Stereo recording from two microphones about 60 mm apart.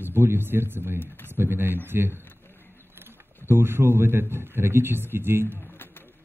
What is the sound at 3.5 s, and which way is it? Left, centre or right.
Speech, right.